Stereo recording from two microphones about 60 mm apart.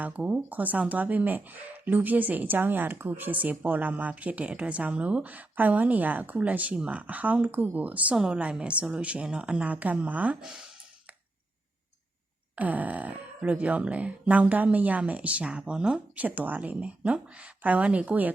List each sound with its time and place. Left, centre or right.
0.0 s speech: right
8.1 s a woman's voice: centre; by 10.3 s right
12.5 s speech: right
16.2 s speech: right